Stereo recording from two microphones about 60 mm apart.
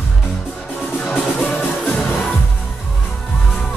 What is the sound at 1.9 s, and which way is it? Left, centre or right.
Music, centre.